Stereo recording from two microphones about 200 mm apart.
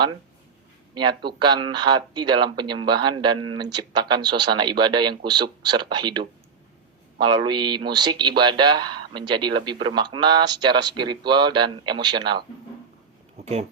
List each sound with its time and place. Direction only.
0.9 s speech: 20° right (ahead or behind)